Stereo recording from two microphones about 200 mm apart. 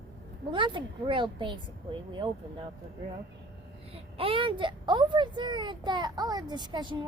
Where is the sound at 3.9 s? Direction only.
25° right (ahead or behind).